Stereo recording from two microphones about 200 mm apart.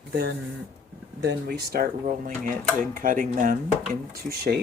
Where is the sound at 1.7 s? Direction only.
45° right (ahead or behind).